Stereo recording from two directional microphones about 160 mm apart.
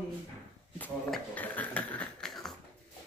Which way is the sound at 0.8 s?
10° left (ahead or behind).